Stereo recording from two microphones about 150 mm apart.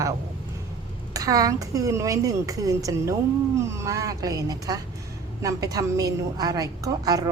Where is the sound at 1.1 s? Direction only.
25° right (ahead or behind).